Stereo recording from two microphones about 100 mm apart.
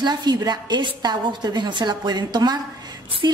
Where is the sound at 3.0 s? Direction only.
65° right (ahead or behind).